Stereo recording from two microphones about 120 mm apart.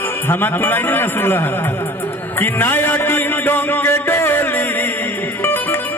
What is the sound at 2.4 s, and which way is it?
Music, 15° left (ahead or behind).